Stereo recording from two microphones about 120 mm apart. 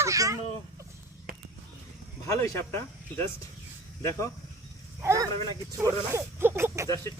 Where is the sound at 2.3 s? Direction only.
20° left (ahead or behind).